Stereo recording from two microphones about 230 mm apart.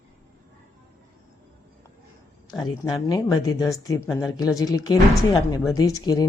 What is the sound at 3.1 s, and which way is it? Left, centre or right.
Speech, centre.